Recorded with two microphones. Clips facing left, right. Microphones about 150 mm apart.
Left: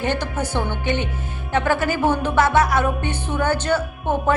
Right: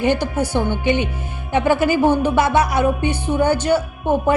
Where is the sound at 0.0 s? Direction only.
10° right (ahead or behind).